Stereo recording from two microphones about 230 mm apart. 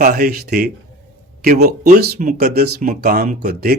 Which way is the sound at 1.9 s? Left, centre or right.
Right.